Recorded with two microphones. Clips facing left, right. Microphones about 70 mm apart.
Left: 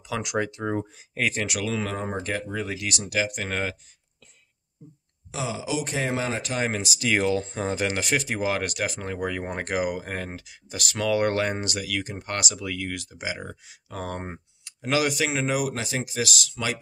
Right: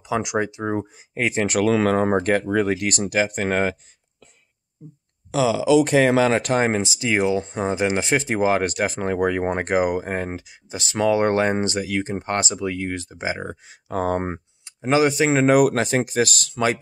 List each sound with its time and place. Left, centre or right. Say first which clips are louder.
0.0 s speech: right 5 dB; right
1.7 s speech: right 11 dB; right
5.3 s speech: right 12 dB; right
6.5 s speech: right 7 dB; right
14.6 s speech: right 6 dB; right
15.3 s speech: right 10 dB; right